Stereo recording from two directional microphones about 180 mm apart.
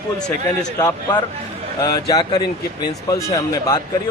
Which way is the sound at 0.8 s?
20° left (ahead or behind).